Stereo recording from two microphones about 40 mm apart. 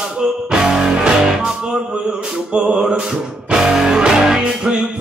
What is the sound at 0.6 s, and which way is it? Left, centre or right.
Music, right.